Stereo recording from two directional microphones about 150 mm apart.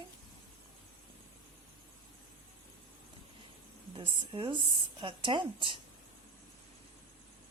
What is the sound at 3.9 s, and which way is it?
A woman's voice, 35° right (ahead or behind).